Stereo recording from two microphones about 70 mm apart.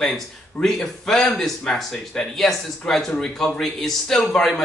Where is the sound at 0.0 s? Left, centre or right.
Centre.